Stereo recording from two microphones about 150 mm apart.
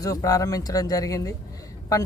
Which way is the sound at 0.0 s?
25° left (ahead or behind).